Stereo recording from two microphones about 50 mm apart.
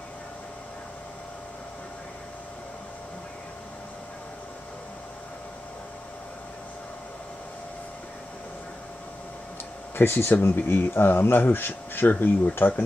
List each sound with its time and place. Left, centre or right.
9.9 s speech: left